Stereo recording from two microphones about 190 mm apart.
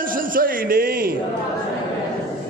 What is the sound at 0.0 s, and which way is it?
A man's voice, 45° right (ahead or behind).